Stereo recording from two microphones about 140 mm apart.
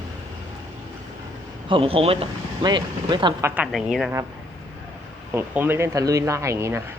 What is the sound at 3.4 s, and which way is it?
Speech, 10° right (ahead or behind).